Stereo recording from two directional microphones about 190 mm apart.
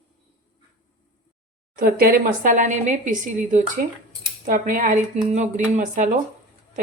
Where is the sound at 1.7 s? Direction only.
50° right (ahead or behind).